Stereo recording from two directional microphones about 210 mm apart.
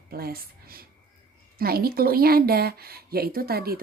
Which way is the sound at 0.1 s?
45° right (ahead or behind).